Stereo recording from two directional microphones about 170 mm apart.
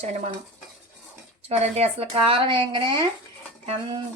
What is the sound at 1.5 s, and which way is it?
Speech, 40° right (ahead or behind).